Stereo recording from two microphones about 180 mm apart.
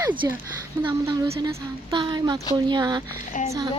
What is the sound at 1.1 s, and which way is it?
Speech, 25° right (ahead or behind).